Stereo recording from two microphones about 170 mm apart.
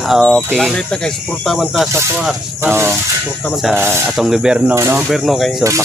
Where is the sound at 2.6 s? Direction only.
15° right (ahead or behind).